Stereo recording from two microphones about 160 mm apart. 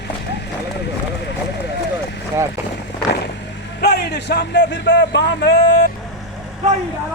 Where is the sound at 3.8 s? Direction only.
90° left.